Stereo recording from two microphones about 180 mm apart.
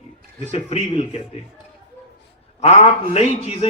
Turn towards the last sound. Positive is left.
turn(degrees=35)  # may be behind; listen again after turning